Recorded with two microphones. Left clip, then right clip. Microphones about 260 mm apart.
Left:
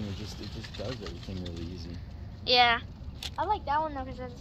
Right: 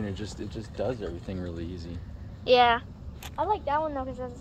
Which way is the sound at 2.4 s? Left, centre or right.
Right.